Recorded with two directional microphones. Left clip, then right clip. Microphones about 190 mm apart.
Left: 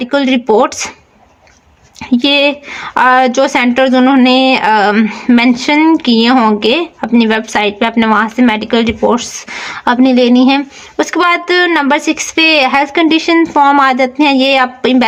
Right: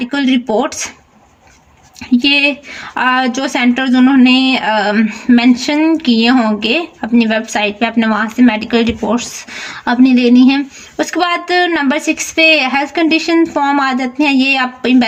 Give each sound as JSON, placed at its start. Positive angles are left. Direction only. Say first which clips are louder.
{"t": 0.0, "sound": "a woman's voice", "louder": "left 3 dB", "side_deg": 40}
{"t": 2.1, "sound": "a woman's voice", "louder": "left 1 dB", "side_deg": 35}